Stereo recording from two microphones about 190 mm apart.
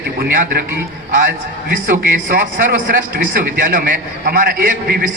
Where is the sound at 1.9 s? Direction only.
45° right (ahead or behind).